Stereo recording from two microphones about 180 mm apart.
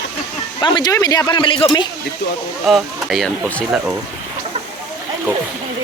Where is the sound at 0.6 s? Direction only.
25° left (ahead or behind).